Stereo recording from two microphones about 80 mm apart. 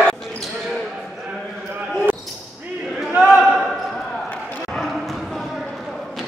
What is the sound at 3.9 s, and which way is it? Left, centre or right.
Basketball bounce, centre.